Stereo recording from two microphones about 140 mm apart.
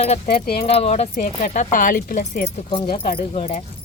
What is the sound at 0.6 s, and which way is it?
Speech, 45° left (ahead or behind).